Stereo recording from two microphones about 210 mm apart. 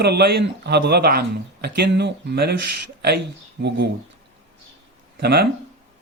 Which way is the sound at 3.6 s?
55° right (ahead or behind).